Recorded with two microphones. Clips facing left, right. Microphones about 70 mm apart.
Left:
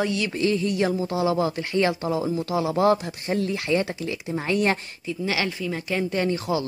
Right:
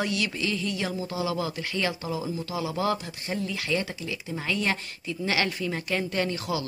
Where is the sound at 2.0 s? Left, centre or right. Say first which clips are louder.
Left 6 dB; left.